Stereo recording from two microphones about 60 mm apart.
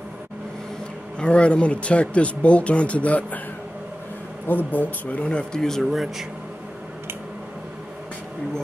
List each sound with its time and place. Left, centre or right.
1.2 s speech: centre
4.5 s speech: left; by 5.9 s centre
5.9 s speech: centre